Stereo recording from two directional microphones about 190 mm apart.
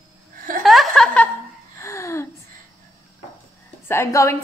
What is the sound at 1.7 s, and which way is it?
Gasp, 15° left (ahead or behind).